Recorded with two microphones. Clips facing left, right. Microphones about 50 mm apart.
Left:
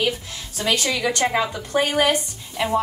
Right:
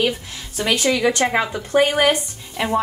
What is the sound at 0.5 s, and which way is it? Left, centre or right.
A woman's voice, right.